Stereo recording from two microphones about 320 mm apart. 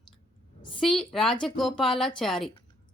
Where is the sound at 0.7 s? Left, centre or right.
Centre.